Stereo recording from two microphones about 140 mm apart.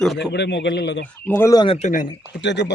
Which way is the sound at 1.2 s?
15° left (ahead or behind).